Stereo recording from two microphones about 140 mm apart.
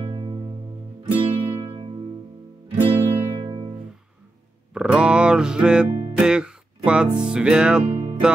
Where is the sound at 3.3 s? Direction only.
35° right (ahead or behind).